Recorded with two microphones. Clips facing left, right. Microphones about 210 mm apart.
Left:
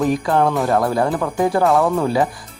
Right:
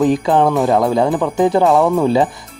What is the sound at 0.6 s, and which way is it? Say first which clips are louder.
Speech: right 3 dB; 15° right (ahead or behind).